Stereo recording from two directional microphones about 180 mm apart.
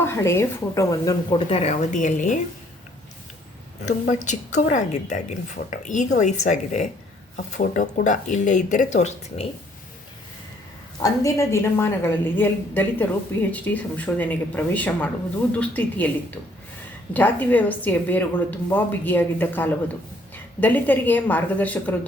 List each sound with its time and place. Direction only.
0.0 s a woman's voice: 15° left (ahead or behind); by 2.4 s 45° left (ahead or behind)
4.2 s speech: 40° left (ahead or behind)
11.0 s a woman's voice: 15° left (ahead or behind)